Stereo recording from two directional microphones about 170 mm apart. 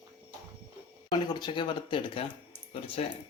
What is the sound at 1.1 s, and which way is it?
Speech, 25° left (ahead or behind).